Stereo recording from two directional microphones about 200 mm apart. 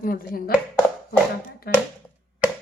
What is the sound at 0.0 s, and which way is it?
Speech, 45° left (ahead or behind).